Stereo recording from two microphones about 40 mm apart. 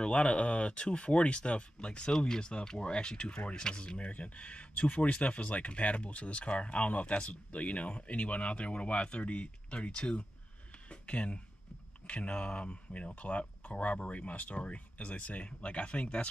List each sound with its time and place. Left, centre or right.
0.0 s speech: left